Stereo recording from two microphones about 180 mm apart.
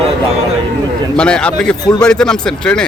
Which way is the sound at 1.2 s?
5° left (ahead or behind).